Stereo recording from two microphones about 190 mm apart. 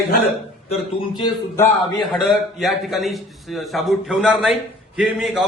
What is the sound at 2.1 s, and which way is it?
A man's voice, centre (ahead or behind).